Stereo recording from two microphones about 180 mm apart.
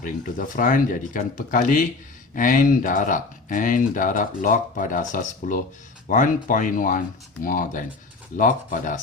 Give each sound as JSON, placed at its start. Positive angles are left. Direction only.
{"t": 0.0, "sound": "speech", "side_deg": 50}